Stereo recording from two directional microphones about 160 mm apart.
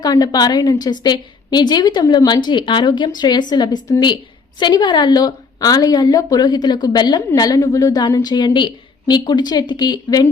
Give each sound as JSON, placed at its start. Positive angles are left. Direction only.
{"t": 0.0, "sound": "a woman's voice", "side_deg": 25}